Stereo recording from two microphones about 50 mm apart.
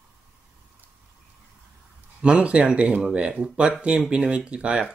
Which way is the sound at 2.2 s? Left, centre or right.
Centre.